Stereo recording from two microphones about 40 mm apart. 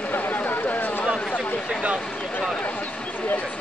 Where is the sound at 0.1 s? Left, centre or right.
Left.